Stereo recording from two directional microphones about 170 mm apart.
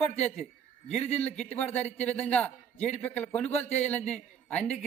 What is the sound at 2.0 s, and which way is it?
A man's voice, 5° left (ahead or behind).